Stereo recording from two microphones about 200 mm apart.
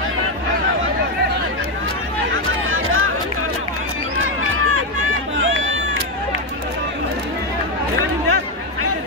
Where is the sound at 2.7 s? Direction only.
90° right.